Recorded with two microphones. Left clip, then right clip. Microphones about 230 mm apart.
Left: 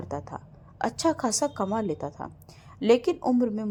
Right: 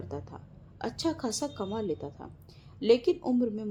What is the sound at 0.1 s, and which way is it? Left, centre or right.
A woman's voice, left.